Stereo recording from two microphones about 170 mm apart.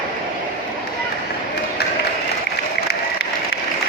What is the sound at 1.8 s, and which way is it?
Crowd, 70° left (ahead or behind).